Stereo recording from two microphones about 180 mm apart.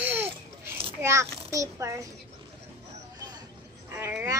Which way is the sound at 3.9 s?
15° right (ahead or behind).